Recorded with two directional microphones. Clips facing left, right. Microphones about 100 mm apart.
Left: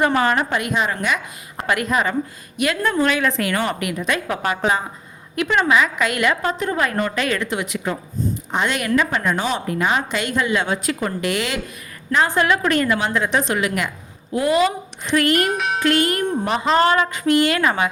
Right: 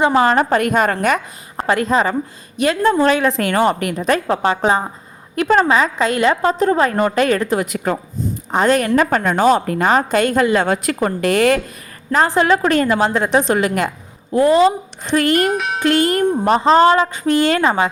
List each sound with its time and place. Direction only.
0.0 s a woman's voice: 25° right (ahead or behind); by 1.6 s 45° right (ahead or behind)
1.6 s a woman's voice: 30° right (ahead or behind)
15.4 s music: centre (ahead or behind)
15.8 s a woman's voice: 30° right (ahead or behind)